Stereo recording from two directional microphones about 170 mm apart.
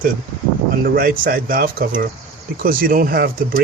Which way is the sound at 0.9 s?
55° right (ahead or behind).